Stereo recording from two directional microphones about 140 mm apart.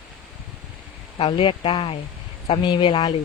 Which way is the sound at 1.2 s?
35° left (ahead or behind).